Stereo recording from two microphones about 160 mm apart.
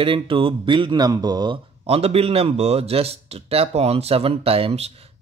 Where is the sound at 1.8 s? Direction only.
40° right (ahead or behind).